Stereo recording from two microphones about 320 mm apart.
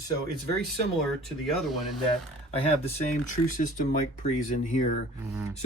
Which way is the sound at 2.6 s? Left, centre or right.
Centre.